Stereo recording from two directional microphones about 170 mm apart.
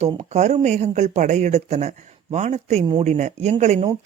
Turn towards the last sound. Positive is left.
turn(degrees=-45)  # may be behind; listen again after turning